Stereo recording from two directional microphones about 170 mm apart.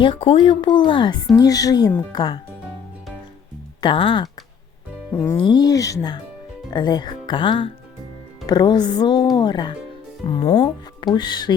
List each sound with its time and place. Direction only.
0.0 s speech: 30° left (ahead or behind)
3.8 s speech: 30° left (ahead or behind)
5.1 s speech: 15° left (ahead or behind)
5.4 s speech: 25° left (ahead or behind)